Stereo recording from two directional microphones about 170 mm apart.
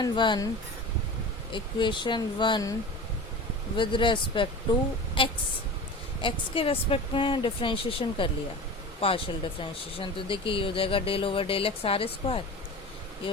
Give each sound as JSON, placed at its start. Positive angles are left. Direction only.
{"t": 0.0, "sound": "speech", "side_deg": 25}
{"t": 1.5, "sound": "speech", "side_deg": 30}
{"t": 3.8, "sound": "speech", "side_deg": 30}
{"t": 6.2, "sound": "speech", "side_deg": 30}